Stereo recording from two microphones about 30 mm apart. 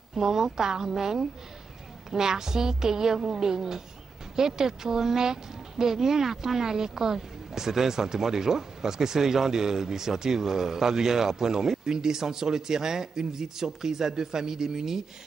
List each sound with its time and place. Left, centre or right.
0.1 s speech: centre